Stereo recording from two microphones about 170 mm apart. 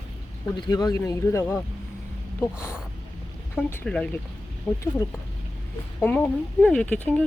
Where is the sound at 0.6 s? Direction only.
20° left (ahead or behind).